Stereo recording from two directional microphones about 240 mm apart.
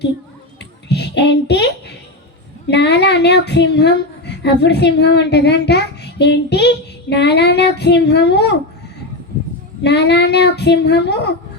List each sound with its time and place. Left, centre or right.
0.9 s a child's voice: left
9.8 s speech: left